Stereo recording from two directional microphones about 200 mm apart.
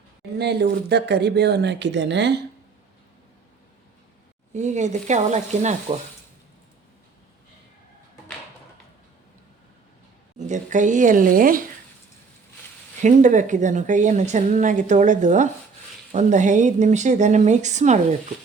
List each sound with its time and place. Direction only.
0.3 s speech: 55° right (ahead or behind)
4.5 s a woman's voice: 35° right (ahead or behind)
10.3 s a woman's voice: 35° right (ahead or behind)
13.0 s a woman's voice: 40° right (ahead or behind)